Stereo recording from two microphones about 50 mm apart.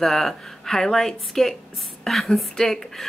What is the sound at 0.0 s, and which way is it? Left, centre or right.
Speech, centre.